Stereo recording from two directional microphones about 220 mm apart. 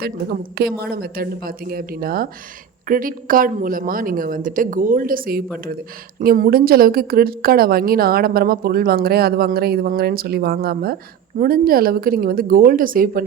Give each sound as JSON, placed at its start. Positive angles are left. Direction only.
{"t": 0.0, "sound": "a woman's voice", "side_deg": -45}